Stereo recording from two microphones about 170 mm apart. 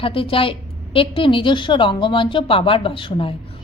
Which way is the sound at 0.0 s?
30° left (ahead or behind).